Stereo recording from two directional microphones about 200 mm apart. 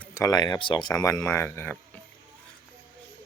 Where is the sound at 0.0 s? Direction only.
15° left (ahead or behind).